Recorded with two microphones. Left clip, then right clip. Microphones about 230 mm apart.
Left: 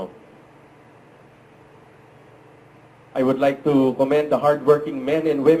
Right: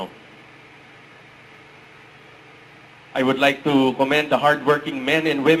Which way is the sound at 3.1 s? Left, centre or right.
Centre.